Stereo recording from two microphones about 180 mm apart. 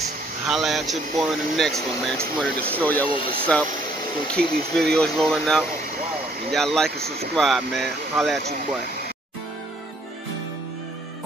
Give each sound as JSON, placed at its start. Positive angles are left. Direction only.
{"t": 0.5, "sound": "speech", "side_deg": 0}
{"t": 3.1, "sound": "speech", "side_deg": 30}
{"t": 4.3, "sound": "speech", "side_deg": 5}